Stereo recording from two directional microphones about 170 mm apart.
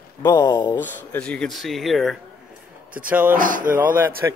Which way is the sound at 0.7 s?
10° left (ahead or behind).